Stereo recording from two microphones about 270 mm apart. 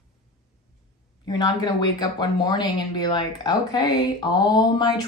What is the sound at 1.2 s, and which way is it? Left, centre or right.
Speech, centre.